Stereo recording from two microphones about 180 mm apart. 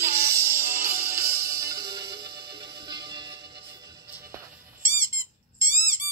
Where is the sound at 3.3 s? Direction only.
65° right (ahead or behind).